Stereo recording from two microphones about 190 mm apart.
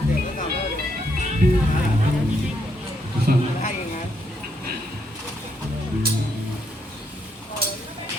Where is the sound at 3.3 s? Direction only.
50° right (ahead or behind).